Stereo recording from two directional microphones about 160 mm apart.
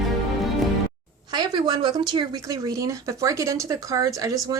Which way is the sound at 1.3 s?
30° right (ahead or behind).